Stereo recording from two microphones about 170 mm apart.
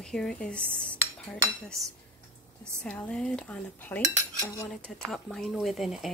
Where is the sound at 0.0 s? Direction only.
5° left (ahead or behind).